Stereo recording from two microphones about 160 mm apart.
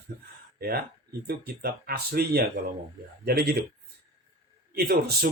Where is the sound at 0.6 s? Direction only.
75° right (ahead or behind).